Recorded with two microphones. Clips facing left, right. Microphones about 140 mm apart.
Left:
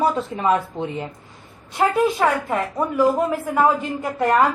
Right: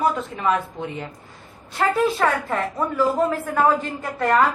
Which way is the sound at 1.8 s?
15° left (ahead or behind).